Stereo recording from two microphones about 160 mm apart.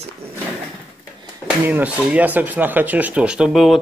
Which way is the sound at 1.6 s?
10° right (ahead or behind).